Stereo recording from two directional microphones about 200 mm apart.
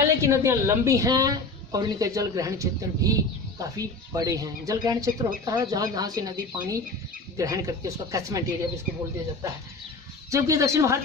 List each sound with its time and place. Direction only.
0.2 s a woman's voice: 15° right (ahead or behind)
10.3 s a woman's voice: 15° right (ahead or behind)